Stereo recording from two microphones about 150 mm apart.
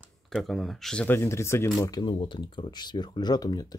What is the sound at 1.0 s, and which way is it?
Speech, 15° left (ahead or behind).